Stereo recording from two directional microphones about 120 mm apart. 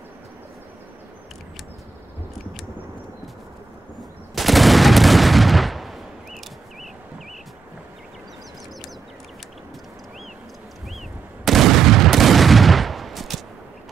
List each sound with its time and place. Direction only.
4.4 s gunshot: centre (ahead or behind)
11.4 s gunshot: centre (ahead or behind)